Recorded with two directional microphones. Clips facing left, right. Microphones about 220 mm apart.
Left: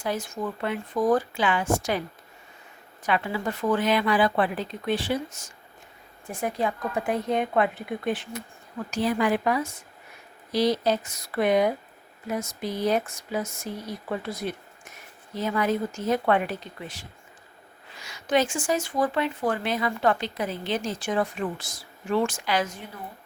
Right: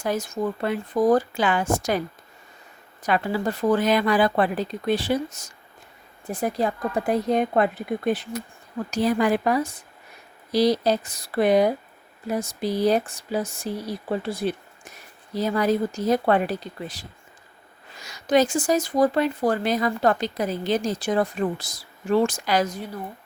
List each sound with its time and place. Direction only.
0.0 s speech: 40° right (ahead or behind)
3.0 s speech: 40° right (ahead or behind)